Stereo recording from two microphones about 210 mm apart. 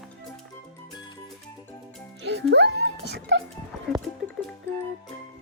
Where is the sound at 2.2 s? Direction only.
55° right (ahead or behind).